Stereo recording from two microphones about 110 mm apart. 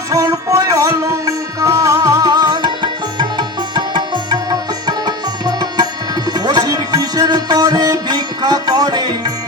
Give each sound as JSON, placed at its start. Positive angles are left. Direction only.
{"t": 0.1, "sound": "music", "side_deg": -30}